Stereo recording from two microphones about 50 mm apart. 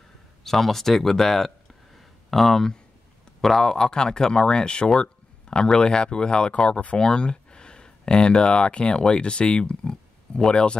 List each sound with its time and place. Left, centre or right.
0.4 s speech: centre